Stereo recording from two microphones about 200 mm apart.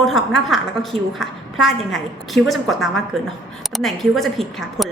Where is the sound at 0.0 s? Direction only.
Centre (ahead or behind).